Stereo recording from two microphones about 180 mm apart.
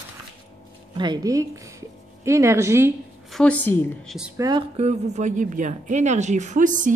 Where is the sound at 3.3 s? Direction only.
5° left (ahead or behind).